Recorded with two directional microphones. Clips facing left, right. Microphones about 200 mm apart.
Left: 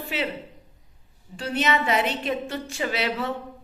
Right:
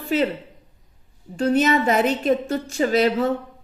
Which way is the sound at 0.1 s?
40° right (ahead or behind).